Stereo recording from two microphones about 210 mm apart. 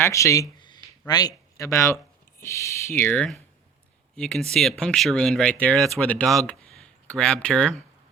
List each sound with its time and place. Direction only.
0.0 s speech: 15° left (ahead or behind)
0.6 s a sound: 20° left (ahead or behind)
2.4 s speech: 15° left (ahead or behind)